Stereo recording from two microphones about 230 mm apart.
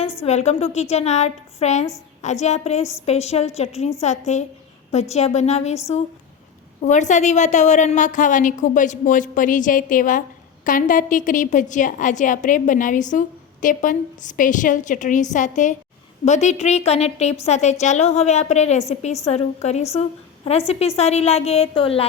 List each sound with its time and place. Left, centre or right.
0.2 s a woman's voice: left
6.8 s a woman's voice: left